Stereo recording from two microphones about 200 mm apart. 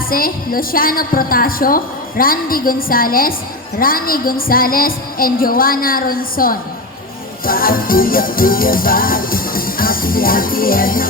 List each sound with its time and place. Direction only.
0.1 s music: 45° left (ahead or behind)